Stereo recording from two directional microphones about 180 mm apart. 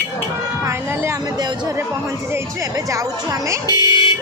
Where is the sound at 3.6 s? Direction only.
20° left (ahead or behind).